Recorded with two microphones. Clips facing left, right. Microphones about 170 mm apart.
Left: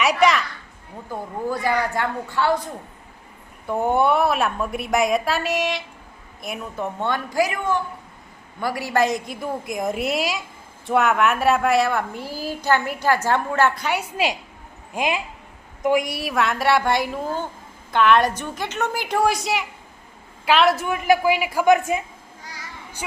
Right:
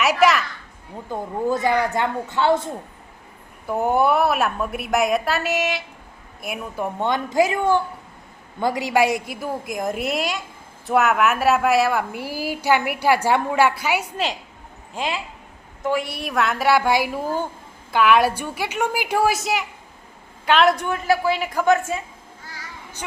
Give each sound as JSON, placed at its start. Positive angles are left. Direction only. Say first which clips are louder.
{"t": 0.0, "sound": "a child's voice", "louder": "right 1 dB", "side_deg": -5}
{"t": 1.1, "sound": "a woman's voice", "louder": "right 4 dB", "side_deg": -20}
{"t": 3.7, "sound": "a woman's voice", "louder": "even", "side_deg": -5}
{"t": 14.9, "sound": "a woman's voice", "louder": "left 3 dB", "side_deg": 15}